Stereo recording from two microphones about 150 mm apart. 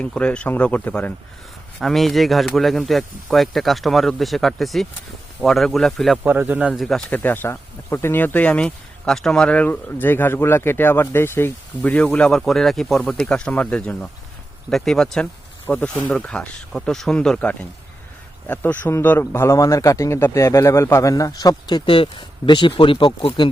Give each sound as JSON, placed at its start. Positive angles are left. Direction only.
{"t": 0.0, "sound": "speech", "side_deg": 10}
{"t": 6.2, "sound": "speech", "side_deg": -10}
{"t": 6.8, "sound": "speech", "side_deg": 10}